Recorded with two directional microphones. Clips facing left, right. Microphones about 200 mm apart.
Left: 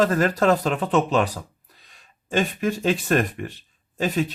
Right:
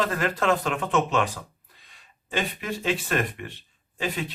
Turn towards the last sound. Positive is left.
turn(degrees=45)  # may be behind; listen again after turning